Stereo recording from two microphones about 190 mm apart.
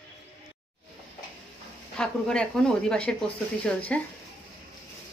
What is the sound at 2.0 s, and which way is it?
A woman's voice, 5° left (ahead or behind).